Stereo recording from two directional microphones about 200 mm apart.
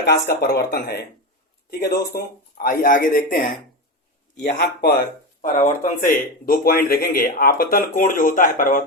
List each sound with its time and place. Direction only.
0.0 s speech: 55° left (ahead or behind)
2.1 s speech: 45° left (ahead or behind)
4.4 s speech: 55° left (ahead or behind)
5.4 s speech: 40° left (ahead or behind)